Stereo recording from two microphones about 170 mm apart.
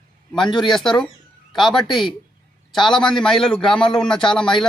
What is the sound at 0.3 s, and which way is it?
Speech, centre (ahead or behind).